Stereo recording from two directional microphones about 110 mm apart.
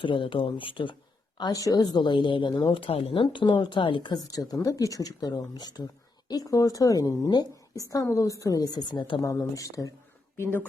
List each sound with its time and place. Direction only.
0.0 s speech: 50° left (ahead or behind)
1.4 s speech: 35° left (ahead or behind)
9.2 s speech: 30° left (ahead or behind)
10.3 s speech: 20° left (ahead or behind)